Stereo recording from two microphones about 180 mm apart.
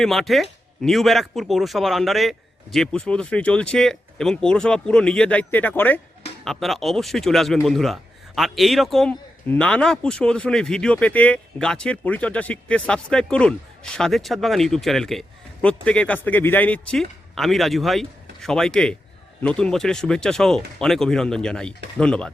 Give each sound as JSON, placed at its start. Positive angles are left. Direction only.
{"t": 0.0, "sound": "speech", "side_deg": 0}